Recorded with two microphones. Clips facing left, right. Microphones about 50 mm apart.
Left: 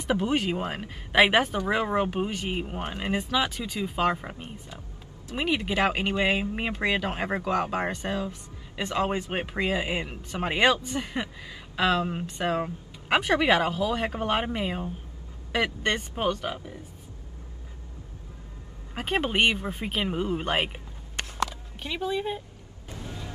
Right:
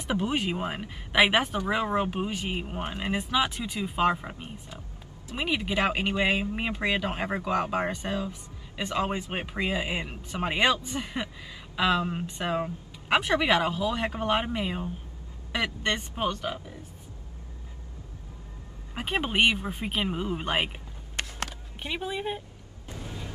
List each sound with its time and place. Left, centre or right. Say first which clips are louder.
0.0 s speech: left 2 dB; centre
3.2 s speech: right 1 dB; centre
3.8 s speech: right 1 dB; centre
9.3 s speech: left 2 dB; centre
9.9 s speech: left 1 dB; centre
10.4 s speech: left 2 dB; centre
18.9 s speech: left 1 dB; centre
21.2 s a sound: left 4 dB; right
21.8 s speech: left 2 dB; centre